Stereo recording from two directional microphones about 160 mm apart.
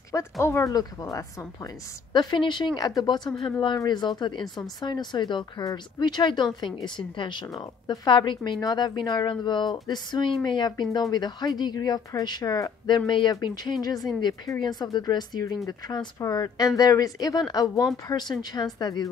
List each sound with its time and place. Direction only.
0.1 s speech: 15° left (ahead or behind)